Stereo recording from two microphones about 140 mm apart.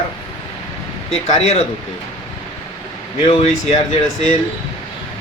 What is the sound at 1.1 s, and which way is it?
Speech, 50° left (ahead or behind).